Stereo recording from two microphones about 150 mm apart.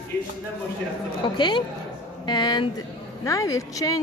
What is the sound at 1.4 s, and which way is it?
A woman's voice, 30° left (ahead or behind).